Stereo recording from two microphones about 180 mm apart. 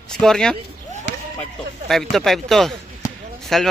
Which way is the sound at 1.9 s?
Centre (ahead or behind).